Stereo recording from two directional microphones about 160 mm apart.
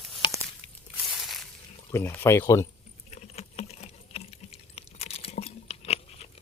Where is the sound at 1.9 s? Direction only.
15° left (ahead or behind).